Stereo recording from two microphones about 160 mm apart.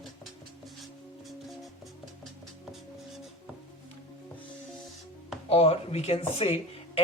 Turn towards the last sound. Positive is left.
turn(degrees=40)  # may be behind; listen again after turning